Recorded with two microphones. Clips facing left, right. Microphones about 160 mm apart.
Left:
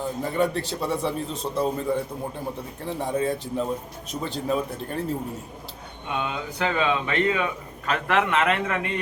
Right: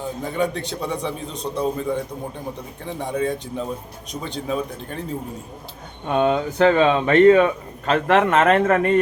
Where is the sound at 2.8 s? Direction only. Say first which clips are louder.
Right 1 dB; 5° left (ahead or behind).